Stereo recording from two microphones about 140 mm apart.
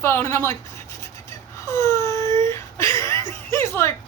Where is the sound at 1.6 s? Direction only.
20° left (ahead or behind).